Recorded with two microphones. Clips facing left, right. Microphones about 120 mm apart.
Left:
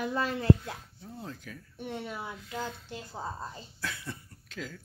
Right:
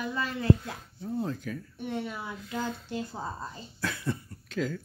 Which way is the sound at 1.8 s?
30° left (ahead or behind).